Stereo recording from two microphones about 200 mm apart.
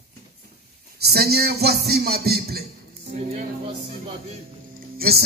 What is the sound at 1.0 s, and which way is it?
Speech, 50° right (ahead or behind).